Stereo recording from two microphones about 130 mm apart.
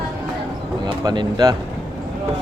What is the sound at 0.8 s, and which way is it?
Speech, 30° right (ahead or behind).